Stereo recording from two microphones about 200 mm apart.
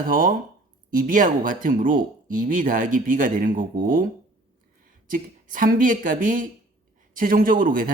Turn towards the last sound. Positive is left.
turn(degrees=-45)  # may be behind; listen again after turning